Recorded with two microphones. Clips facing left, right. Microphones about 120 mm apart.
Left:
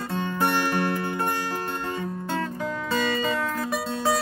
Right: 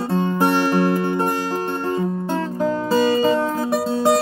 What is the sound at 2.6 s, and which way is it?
Music, 30° right (ahead or behind).